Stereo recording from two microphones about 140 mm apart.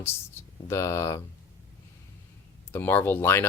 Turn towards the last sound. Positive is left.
turn(degrees=15)  # may be behind; listen again after turning